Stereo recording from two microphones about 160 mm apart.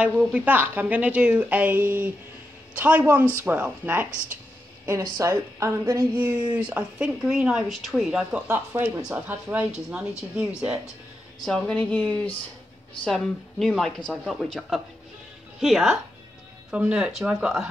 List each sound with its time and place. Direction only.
0.0 s speech: 10° right (ahead or behind)
11.4 s speech: 5° left (ahead or behind)